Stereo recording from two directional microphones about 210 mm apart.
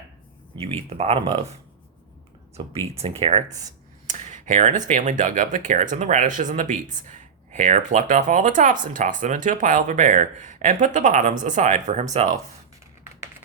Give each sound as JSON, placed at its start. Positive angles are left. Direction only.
{"t": 0.5, "sound": "speech", "side_deg": -30}
{"t": 2.6, "sound": "speech", "side_deg": -25}